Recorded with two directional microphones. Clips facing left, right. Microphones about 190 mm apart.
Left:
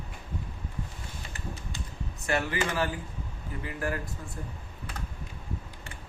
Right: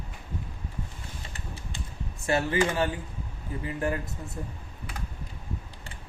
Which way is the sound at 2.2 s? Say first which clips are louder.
Right 3 dB; 30° right (ahead or behind).